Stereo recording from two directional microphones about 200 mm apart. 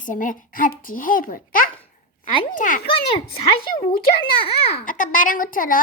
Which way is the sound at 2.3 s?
25° left (ahead or behind).